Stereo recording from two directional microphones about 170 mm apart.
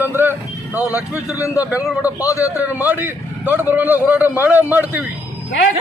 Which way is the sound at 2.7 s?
10° right (ahead or behind).